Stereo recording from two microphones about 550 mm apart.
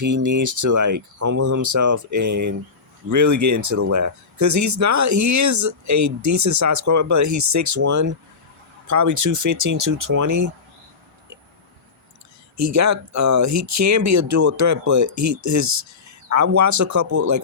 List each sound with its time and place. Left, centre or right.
0.0 s speech: right
12.5 s speech: right